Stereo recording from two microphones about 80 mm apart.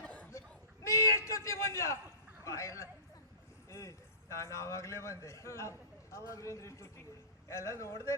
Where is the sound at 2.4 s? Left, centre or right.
Left.